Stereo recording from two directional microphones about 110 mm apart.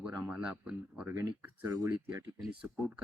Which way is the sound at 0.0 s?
10° right (ahead or behind).